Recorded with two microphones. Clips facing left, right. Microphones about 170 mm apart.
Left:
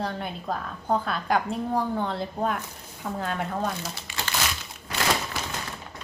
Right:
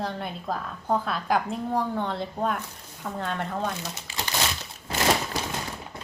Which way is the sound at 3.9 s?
20° right (ahead or behind).